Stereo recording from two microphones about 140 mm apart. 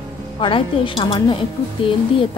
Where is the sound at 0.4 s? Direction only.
35° left (ahead or behind).